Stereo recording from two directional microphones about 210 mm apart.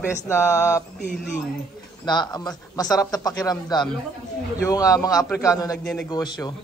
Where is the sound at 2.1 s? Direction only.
20° left (ahead or behind).